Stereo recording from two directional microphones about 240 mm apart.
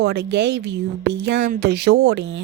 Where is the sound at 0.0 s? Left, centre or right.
Right.